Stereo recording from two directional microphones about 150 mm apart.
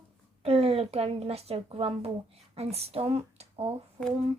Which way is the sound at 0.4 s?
40° right (ahead or behind).